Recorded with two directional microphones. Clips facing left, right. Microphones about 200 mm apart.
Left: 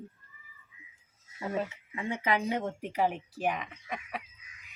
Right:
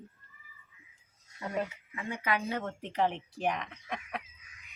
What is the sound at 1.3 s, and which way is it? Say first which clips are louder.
Speech: left 1 dB; centre (ahead or behind).